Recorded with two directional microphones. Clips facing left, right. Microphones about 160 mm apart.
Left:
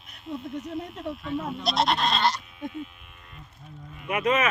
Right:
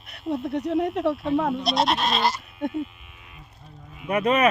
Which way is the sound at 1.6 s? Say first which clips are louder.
Right 2 dB; centre (ahead or behind).